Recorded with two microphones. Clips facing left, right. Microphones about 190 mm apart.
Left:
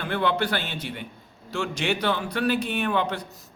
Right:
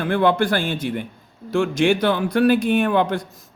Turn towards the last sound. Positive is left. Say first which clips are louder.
# right 7 dB
turn(degrees=-50)  # may be behind; listen again after turning